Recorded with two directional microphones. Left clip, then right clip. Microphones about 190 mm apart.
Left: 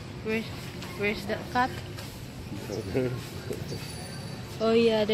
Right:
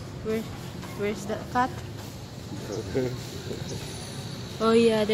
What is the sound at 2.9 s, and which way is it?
Speech, 55° left (ahead or behind).